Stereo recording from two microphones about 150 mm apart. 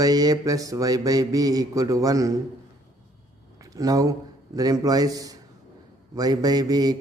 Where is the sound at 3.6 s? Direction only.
25° right (ahead or behind).